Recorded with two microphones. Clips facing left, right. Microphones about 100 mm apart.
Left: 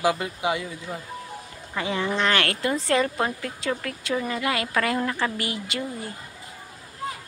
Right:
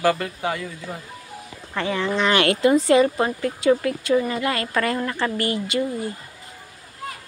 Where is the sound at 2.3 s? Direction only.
20° right (ahead or behind); by 5.8 s centre (ahead or behind).